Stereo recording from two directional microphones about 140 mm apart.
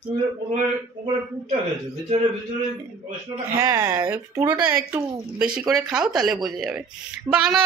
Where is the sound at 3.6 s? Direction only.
20° right (ahead or behind).